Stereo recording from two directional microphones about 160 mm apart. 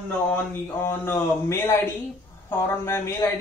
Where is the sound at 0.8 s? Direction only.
15° left (ahead or behind).